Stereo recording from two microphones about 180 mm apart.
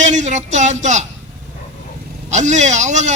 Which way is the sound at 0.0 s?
40° right (ahead or behind).